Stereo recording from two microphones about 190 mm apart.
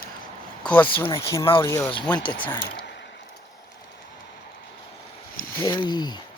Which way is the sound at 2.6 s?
65° left (ahead or behind).